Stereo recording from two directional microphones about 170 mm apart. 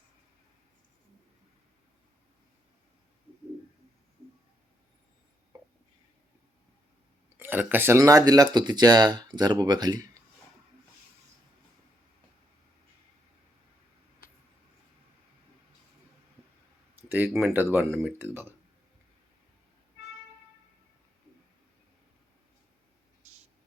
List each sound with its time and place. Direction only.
5.5 s a sound: 20° right (ahead or behind)
7.3 s speech: 10° right (ahead or behind)
17.0 s speech: 10° right (ahead or behind)